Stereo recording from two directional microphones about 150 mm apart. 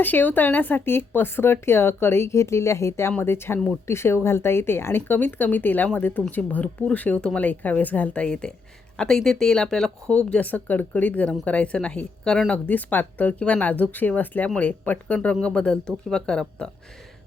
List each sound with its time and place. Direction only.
0.0 s a woman's voice: 10° left (ahead or behind)